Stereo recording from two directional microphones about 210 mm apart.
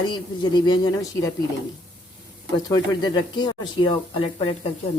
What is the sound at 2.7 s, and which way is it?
Speech, 20° left (ahead or behind).